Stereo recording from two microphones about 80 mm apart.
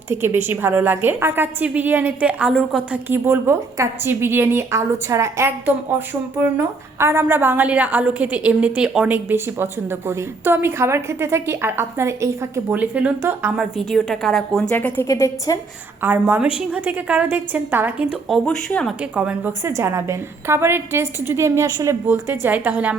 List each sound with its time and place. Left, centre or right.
0.1 s a woman's voice: right; by 3.0 s centre
3.1 s a woman's voice: right; by 9.0 s centre
9.3 s a woman's voice: right
12.7 s a woman's voice: centre
14.0 s a woman's voice: centre
14.8 s a woman's voice: left
15.0 s a woman's voice: left
16.0 s a woman's voice: right
18.0 s a woman's voice: centre
18.4 s speech: centre
19.1 s a woman's voice: centre
19.6 s a woman's voice: right